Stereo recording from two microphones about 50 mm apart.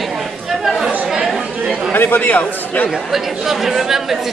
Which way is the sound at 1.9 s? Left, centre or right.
Left.